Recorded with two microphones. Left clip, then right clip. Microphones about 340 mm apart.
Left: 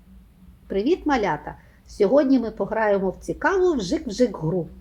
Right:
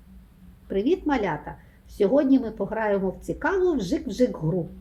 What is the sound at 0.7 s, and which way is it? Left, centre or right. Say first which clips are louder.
A woman's voice: left 2 dB; centre.